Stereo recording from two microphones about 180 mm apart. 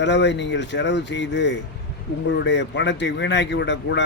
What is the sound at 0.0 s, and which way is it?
Speech, 75° left (ahead or behind).